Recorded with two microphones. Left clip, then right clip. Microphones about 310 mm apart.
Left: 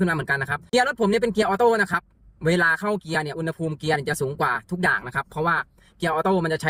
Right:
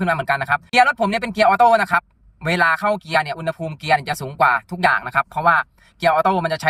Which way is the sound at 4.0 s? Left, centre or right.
Right.